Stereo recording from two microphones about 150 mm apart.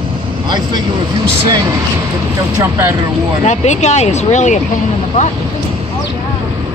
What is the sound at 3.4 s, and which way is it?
Speech, 50° left (ahead or behind).